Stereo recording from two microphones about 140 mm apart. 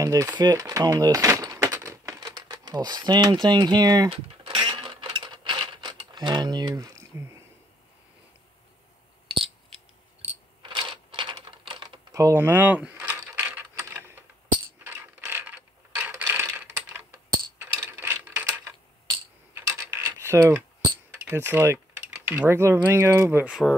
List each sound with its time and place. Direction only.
0.0 s speech: 25° right (ahead or behind)
4.1 s a sound: 35° right (ahead or behind); by 7.3 s 20° right (ahead or behind)
10.6 s typing: 35° right (ahead or behind)
12.1 s mechanisms: 20° right (ahead or behind)
19.5 s mechanisms: 20° right (ahead or behind)
21.3 s speech: 15° right (ahead or behind)